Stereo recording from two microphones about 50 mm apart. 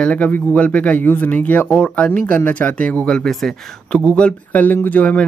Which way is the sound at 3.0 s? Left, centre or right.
Centre.